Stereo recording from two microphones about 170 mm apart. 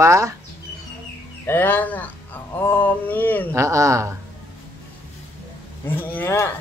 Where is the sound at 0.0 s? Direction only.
20° right (ahead or behind).